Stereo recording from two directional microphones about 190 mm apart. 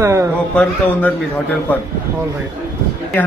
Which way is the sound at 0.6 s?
10° left (ahead or behind).